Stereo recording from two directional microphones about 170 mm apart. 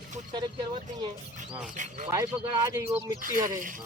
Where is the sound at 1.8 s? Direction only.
50° right (ahead or behind).